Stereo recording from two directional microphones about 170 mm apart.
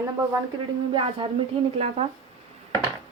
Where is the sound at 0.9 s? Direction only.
30° right (ahead or behind).